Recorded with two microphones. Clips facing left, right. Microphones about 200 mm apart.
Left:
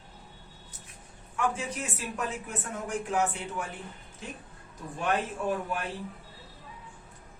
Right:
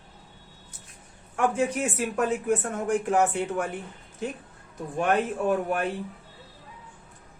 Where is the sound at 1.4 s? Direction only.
55° right (ahead or behind).